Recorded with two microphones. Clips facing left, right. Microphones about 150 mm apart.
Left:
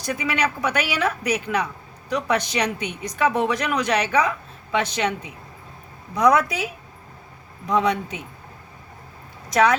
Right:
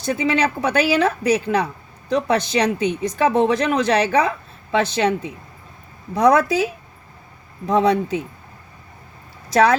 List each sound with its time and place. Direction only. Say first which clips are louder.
0.0 s speech: right 5 dB; 30° right (ahead or behind)
7.7 s speech: right 4 dB; 30° right (ahead or behind)
9.5 s speech: right 3 dB; 30° right (ahead or behind)